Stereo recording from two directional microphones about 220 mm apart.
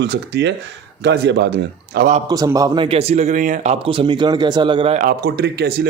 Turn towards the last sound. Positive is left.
turn(degrees=-45)  # may be behind; listen again after turning